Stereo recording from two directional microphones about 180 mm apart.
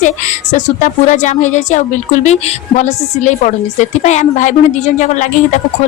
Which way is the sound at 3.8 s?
40° left (ahead or behind).